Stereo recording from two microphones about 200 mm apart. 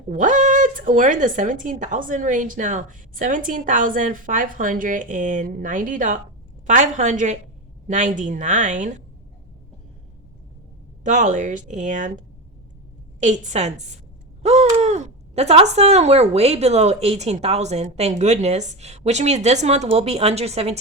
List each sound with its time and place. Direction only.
0.1 s speech: 40° right (ahead or behind)
11.0 s speech: 40° right (ahead or behind)
13.1 s speech: 35° right (ahead or behind)